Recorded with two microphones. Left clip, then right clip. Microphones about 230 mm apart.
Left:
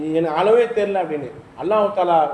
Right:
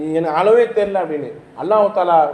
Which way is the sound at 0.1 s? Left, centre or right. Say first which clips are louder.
Right 3 dB; right.